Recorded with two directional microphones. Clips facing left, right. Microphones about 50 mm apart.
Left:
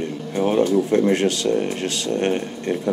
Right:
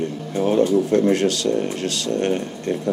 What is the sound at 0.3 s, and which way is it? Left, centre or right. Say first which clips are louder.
Speech: right 1 dB; left.